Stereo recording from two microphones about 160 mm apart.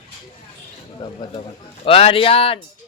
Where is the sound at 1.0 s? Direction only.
25° left (ahead or behind).